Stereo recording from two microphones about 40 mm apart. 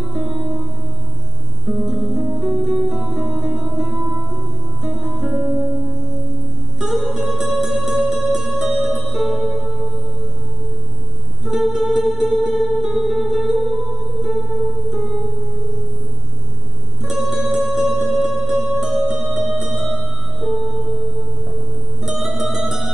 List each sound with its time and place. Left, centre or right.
0.0 s music: centre
2.0 s music: centre
6.8 s music: centre
11.4 s music: centre
17.0 s music: centre
22.1 s music: centre